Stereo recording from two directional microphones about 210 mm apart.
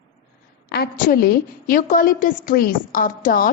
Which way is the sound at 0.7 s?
45° left (ahead or behind).